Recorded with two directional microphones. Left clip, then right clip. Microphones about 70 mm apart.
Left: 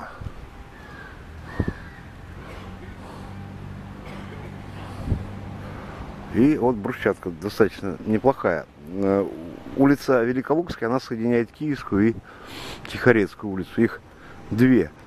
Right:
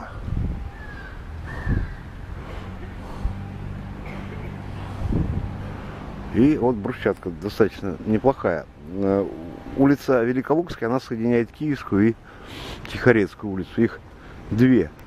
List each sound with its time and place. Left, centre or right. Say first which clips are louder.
6.3 s speech: even; left